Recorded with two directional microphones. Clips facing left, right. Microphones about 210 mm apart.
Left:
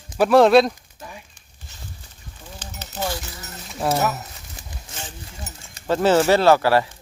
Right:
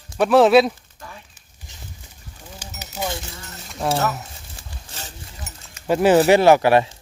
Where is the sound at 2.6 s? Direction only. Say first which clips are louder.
Even; 10° right (ahead or behind).